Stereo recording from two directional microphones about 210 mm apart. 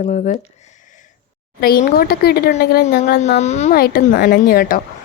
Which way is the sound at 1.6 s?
45° left (ahead or behind).